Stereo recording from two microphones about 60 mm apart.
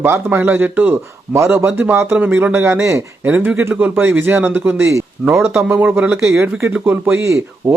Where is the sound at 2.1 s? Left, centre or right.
Right.